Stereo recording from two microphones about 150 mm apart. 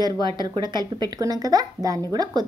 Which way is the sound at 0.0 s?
30° right (ahead or behind).